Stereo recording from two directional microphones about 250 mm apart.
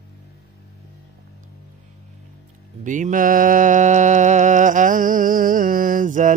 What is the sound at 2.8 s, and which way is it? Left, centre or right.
Music, right.